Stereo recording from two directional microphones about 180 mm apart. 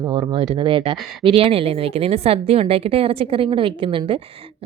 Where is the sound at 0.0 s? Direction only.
25° right (ahead or behind).